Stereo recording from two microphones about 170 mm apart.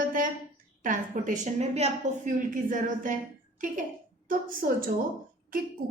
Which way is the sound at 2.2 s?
50° right (ahead or behind).